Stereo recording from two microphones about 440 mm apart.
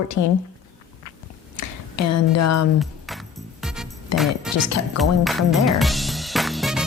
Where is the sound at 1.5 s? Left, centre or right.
Left.